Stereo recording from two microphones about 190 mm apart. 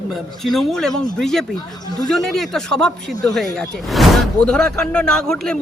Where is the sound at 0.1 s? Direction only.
Centre (ahead or behind).